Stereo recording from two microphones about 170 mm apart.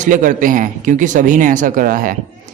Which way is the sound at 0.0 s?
50° right (ahead or behind).